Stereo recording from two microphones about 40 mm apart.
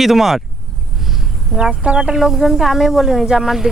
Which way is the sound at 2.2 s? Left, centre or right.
Centre.